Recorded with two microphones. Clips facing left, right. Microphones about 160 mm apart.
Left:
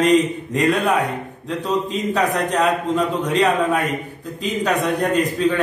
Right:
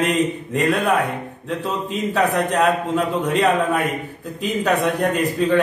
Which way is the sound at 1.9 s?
5° right (ahead or behind).